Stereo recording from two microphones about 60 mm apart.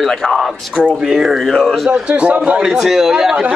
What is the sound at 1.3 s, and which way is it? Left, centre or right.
Speech, centre.